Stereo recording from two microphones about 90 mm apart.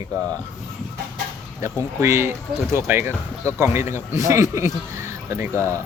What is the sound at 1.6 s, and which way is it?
Speech, 35° right (ahead or behind).